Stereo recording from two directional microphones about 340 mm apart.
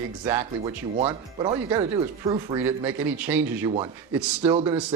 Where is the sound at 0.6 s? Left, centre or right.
Centre.